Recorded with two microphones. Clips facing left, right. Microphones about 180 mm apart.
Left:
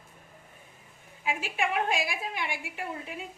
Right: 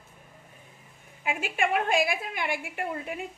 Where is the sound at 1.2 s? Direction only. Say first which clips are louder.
Right 2 dB; 55° right (ahead or behind).